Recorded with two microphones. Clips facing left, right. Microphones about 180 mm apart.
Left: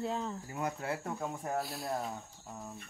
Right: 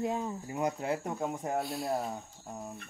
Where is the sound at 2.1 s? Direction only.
20° right (ahead or behind).